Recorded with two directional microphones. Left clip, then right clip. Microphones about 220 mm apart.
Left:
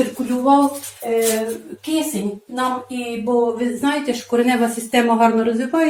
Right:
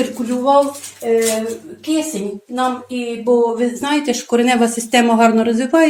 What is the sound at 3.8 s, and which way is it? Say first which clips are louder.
Speech: right 2 dB; 50° right (ahead or behind).